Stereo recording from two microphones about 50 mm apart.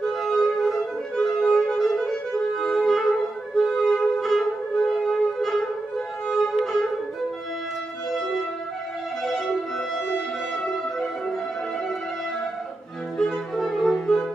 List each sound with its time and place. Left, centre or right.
0.0 s music: centre
5.9 s violin: centre
6.6 s music: centre
9.2 s music: centre
10.1 s brass instrument: centre
13.2 s music: centre